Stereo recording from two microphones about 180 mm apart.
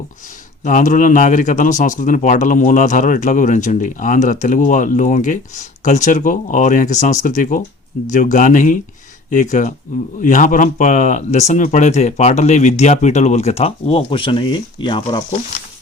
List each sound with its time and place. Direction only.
0.6 s speech: 45° left (ahead or behind); by 15.2 s 25° left (ahead or behind)